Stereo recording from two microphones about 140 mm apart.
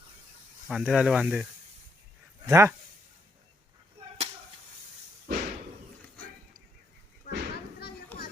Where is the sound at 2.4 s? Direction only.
20° right (ahead or behind).